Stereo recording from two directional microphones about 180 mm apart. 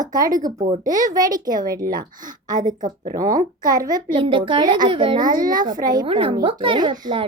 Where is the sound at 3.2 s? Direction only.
50° right (ahead or behind).